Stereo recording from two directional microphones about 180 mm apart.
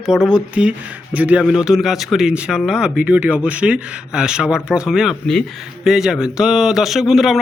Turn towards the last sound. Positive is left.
turn(degrees=0)  # may be behind; listen again after turning